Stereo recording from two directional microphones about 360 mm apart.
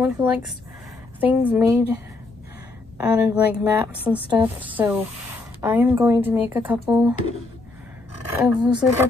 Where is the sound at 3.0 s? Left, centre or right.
Centre.